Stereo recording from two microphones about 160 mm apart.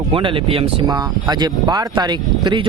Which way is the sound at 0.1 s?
30° right (ahead or behind).